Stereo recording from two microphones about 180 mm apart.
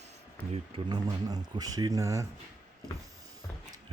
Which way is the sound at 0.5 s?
30° right (ahead or behind).